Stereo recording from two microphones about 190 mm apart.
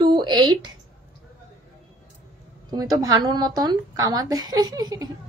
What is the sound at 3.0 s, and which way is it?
A woman's voice, 20° right (ahead or behind).